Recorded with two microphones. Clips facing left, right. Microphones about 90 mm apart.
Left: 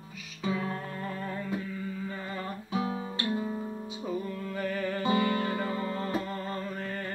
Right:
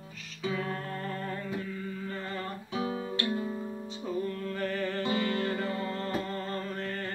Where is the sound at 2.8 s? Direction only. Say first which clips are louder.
Right 1 dB; 30° left (ahead or behind).